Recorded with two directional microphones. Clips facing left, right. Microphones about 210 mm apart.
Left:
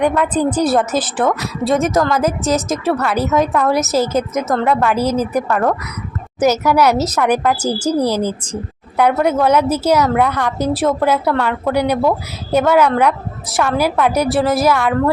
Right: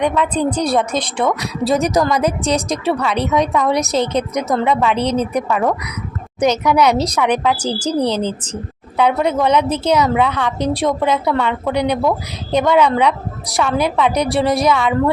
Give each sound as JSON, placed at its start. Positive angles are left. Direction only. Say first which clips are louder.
{"t": 0.0, "sound": "a woman's voice", "louder": "left 2 dB", "side_deg": 5}
{"t": 5.5, "sound": "a woman's voice", "louder": "left 1 dB", "side_deg": -5}
{"t": 6.4, "sound": "a woman's voice", "louder": "left 1 dB", "side_deg": 5}